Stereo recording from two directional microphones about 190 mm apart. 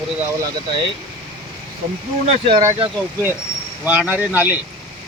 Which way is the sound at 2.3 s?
30° right (ahead or behind).